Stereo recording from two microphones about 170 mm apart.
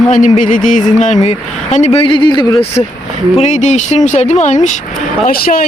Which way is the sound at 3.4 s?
45° left (ahead or behind).